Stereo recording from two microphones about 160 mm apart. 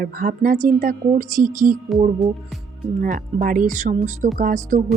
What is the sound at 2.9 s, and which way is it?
A woman's voice, 60° right (ahead or behind).